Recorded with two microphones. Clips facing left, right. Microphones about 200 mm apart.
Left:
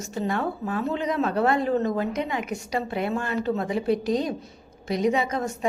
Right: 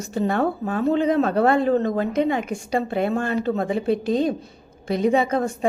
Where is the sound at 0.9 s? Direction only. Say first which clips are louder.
Right 8 dB; 30° right (ahead or behind).